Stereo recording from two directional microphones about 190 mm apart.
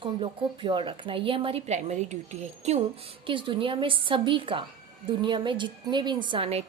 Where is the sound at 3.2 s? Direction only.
25° right (ahead or behind).